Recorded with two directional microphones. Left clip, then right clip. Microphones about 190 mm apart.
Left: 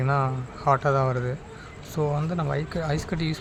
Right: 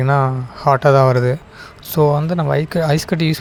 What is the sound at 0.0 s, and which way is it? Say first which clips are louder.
Speech: right 9 dB; 30° right (ahead or behind).